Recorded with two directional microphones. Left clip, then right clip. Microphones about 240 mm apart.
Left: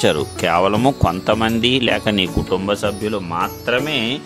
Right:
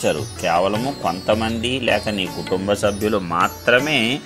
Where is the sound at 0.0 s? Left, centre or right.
Left.